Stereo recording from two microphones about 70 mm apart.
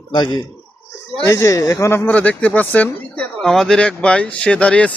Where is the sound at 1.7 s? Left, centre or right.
Left.